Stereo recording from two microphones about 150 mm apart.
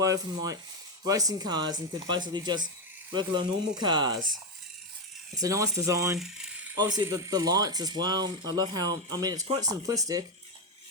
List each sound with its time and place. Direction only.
0.0 s speech: 25° right (ahead or behind)
5.4 s speech: 20° right (ahead or behind)
6.1 s mechanisms: 5° right (ahead or behind)
6.7 s speech: 25° right (ahead or behind)